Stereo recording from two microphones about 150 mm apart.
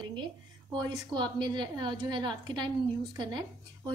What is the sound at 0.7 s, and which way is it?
A woman's voice, 30° right (ahead or behind).